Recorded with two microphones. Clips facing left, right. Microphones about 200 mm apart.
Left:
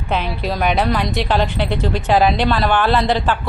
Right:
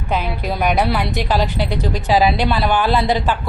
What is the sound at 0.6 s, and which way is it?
A woman's voice, 5° right (ahead or behind).